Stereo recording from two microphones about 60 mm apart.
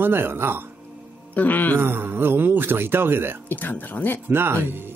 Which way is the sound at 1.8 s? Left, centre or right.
Right.